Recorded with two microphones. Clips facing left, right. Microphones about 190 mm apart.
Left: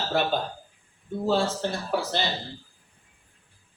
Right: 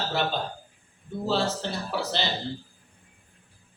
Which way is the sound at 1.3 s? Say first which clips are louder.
Left 1 dB; 50° left (ahead or behind).